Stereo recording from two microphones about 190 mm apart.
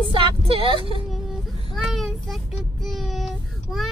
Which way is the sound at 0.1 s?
25° right (ahead or behind).